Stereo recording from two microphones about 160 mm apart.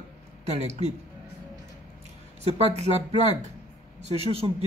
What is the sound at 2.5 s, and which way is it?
A woman's voice, 40° right (ahead or behind).